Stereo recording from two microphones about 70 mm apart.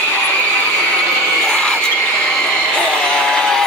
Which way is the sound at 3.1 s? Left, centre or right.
Centre.